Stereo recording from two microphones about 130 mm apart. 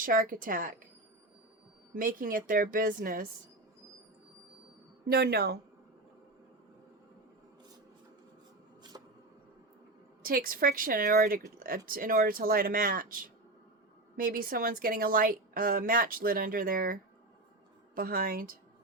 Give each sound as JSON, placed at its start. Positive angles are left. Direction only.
{"t": 0.0, "sound": "a woman's voice", "side_deg": -90}
{"t": 2.0, "sound": "a woman's voice", "side_deg": -90}
{"t": 8.9, "sound": "a sound", "side_deg": -35}
{"t": 10.2, "sound": "a woman's voice", "side_deg": -90}